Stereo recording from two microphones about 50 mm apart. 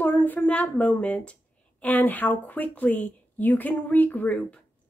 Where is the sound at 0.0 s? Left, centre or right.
Left.